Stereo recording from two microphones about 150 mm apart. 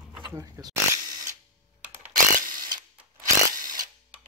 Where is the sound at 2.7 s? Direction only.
25° right (ahead or behind).